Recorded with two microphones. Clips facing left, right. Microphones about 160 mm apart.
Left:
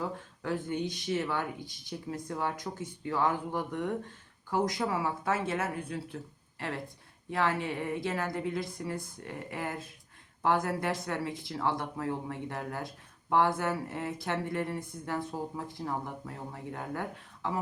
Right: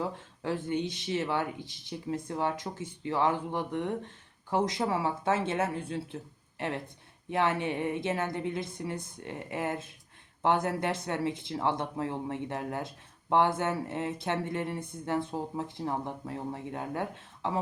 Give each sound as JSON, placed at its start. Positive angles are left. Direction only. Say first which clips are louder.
{"t": 0.4, "sound": "speech", "louder": "right 2 dB", "side_deg": -25}
{"t": 7.3, "sound": "speech", "louder": "right 2 dB", "side_deg": -20}